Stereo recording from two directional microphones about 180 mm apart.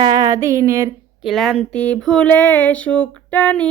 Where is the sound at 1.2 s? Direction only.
Centre (ahead or behind).